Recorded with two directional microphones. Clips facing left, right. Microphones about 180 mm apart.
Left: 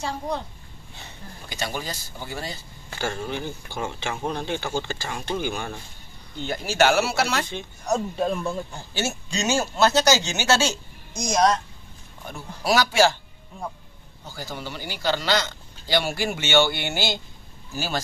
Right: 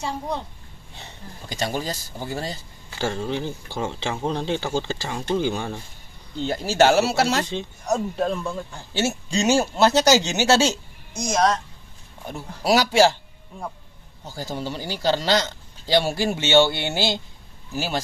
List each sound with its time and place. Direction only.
1.5 s speech: 35° right (ahead or behind)
3.0 s a man's voice: 20° right (ahead or behind)
8.2 s speech: 10° left (ahead or behind)
8.9 s speech: 30° right (ahead or behind)
11.1 s a woman's voice: 5° right (ahead or behind)
12.3 s a man's voice: 30° right (ahead or behind)
14.2 s a man's voice: 30° right (ahead or behind)